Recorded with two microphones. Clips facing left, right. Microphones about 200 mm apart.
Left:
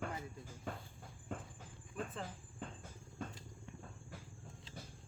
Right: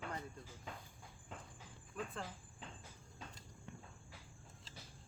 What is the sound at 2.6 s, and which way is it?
Cricket, 50° left (ahead or behind).